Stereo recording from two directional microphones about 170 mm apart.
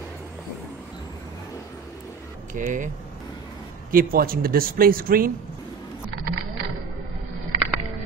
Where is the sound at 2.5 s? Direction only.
50° right (ahead or behind).